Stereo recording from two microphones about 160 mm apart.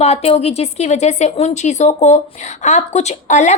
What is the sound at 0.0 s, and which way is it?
A woman's voice, 40° left (ahead or behind).